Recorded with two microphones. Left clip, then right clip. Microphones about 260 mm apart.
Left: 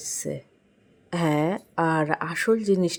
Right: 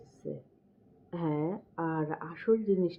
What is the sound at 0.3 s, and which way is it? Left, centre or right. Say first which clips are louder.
A woman's voice: left 8 dB; left.